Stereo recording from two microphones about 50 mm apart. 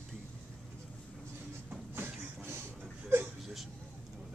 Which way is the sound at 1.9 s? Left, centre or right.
Right.